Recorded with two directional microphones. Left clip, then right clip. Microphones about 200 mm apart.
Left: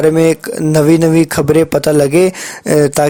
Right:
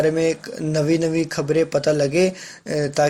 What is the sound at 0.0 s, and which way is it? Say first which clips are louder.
Speech: left 9 dB; 50° left (ahead or behind).